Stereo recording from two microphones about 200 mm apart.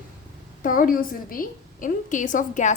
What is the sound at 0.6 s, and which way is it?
A woman's voice, 45° left (ahead or behind).